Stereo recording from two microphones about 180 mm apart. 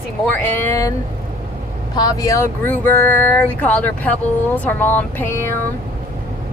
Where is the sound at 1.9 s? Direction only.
20° left (ahead or behind).